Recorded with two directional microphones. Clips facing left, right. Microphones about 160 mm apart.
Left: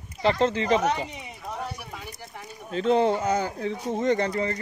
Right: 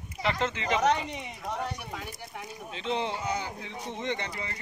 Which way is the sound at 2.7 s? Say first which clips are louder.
Left 10 dB; 45° left (ahead or behind).